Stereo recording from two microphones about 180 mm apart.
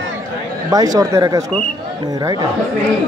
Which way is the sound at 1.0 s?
20° right (ahead or behind).